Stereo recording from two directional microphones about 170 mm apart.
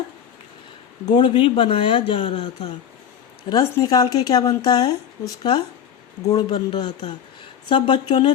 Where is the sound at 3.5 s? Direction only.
25° left (ahead or behind).